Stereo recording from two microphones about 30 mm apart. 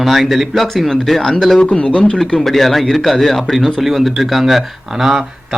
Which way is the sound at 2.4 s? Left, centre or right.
Centre.